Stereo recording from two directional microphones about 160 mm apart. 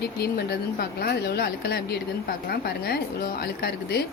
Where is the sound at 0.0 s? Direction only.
90° left.